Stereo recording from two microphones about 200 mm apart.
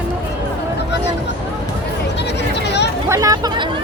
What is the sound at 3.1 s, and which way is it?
Chatter, 15° right (ahead or behind).